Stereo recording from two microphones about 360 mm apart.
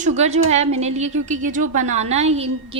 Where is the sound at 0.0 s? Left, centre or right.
Centre.